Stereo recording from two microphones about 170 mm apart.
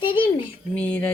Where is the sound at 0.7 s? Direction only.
10° left (ahead or behind).